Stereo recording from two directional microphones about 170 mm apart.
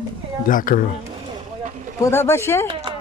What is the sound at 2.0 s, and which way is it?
Speech, 15° left (ahead or behind).